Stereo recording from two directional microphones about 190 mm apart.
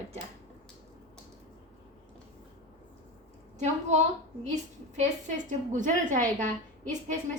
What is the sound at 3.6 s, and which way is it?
Speech, 40° right (ahead or behind).